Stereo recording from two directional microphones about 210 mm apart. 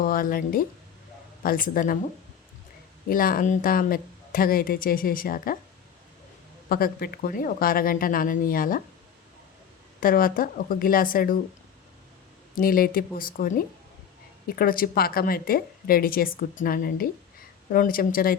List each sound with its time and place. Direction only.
0.0 s a woman's voice: 45° left (ahead or behind)
3.1 s a woman's voice: 45° left (ahead or behind)
6.7 s a woman's voice: 45° left (ahead or behind)
10.0 s a woman's voice: 40° left (ahead or behind)
12.5 s a woman's voice: 45° left (ahead or behind)